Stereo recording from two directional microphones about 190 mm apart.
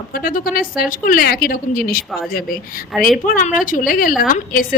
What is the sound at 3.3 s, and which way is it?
Speech, 45° left (ahead or behind).